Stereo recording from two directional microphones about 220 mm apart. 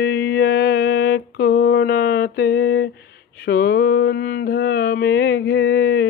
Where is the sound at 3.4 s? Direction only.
45° left (ahead or behind).